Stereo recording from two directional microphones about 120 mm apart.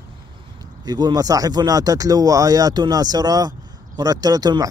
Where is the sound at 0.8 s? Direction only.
35° right (ahead or behind).